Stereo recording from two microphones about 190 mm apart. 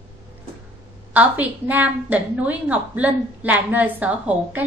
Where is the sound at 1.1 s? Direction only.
10° right (ahead or behind).